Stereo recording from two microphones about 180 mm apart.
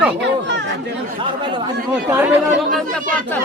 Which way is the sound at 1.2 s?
25° right (ahead or behind).